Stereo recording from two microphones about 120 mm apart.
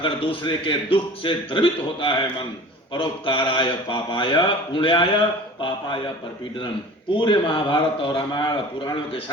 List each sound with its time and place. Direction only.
0.0 s speech: 45° left (ahead or behind)
7.1 s speech: 45° left (ahead or behind)